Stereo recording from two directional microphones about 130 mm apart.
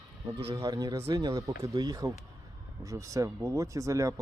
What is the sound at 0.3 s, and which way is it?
Speech, 45° right (ahead or behind).